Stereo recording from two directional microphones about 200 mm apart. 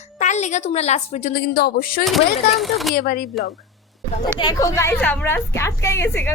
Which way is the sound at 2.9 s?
45° left (ahead or behind).